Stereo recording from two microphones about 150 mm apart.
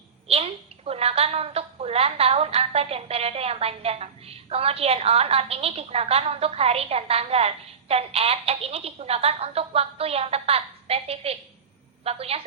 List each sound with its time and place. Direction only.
0.3 s a woman's voice: 40° right (ahead or behind)